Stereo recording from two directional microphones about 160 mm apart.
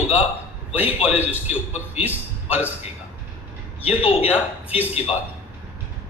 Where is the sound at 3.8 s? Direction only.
10° right (ahead or behind).